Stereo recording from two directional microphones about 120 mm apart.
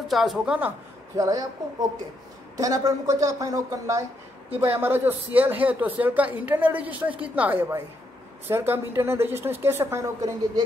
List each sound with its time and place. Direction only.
0.1 s a woman's voice: centre (ahead or behind)
1.1 s a woman's voice: 30° right (ahead or behind)